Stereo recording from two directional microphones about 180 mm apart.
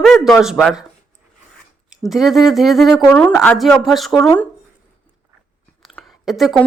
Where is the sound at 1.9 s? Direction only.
Centre (ahead or behind).